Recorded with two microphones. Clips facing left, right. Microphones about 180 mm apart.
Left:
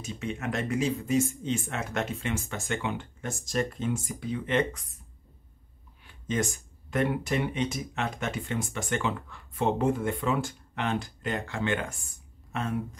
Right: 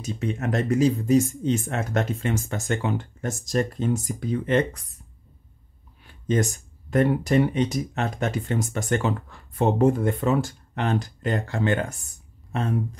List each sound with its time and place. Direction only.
0.0 s speech: 40° right (ahead or behind)
6.2 s speech: 40° right (ahead or behind)